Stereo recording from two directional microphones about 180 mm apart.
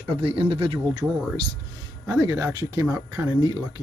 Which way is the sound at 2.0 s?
15° right (ahead or behind).